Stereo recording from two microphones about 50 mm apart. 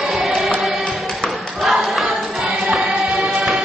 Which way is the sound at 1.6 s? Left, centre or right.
Centre.